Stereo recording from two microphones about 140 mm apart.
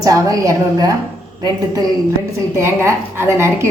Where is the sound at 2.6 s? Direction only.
15° right (ahead or behind).